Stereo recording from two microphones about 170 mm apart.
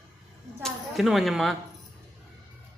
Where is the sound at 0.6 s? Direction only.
Centre (ahead or behind).